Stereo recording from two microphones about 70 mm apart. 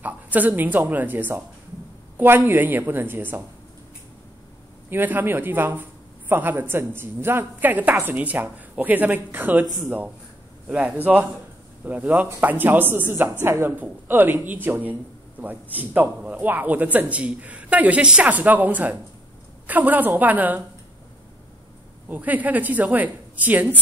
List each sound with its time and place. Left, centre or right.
0.0 s speech: right
4.8 s speech: right
22.1 s speech: right